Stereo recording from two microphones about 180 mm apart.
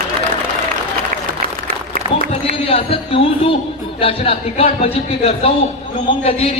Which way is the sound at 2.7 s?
30° left (ahead or behind).